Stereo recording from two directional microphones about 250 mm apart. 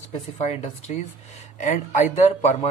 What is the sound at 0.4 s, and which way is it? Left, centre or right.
Speech, left.